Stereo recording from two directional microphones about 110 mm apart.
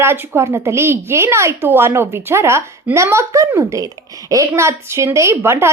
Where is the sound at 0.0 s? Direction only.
25° right (ahead or behind).